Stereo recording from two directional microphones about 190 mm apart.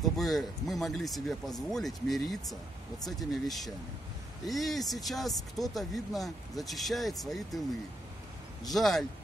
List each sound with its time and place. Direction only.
0.0 s speech: centre (ahead or behind)
8.6 s speech: centre (ahead or behind)